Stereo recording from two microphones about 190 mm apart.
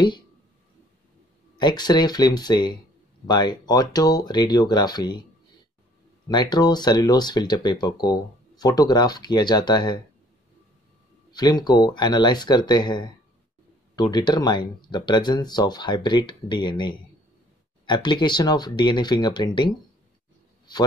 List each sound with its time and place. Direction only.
1.6 s speech: 20° left (ahead or behind)
6.2 s speech: 20° left (ahead or behind)
11.3 s speech: 20° left (ahead or behind)